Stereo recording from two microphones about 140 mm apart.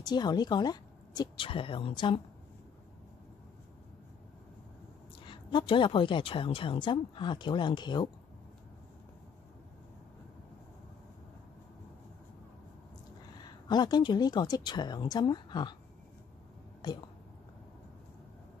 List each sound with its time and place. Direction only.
0.0 s a woman's voice: 30° left (ahead or behind)
5.2 s a woman's voice: 35° left (ahead or behind)
13.4 s a woman's voice: 30° left (ahead or behind)
16.8 s speech: 30° left (ahead or behind)